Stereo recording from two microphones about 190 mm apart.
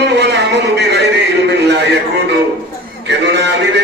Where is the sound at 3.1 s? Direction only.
65° right (ahead or behind).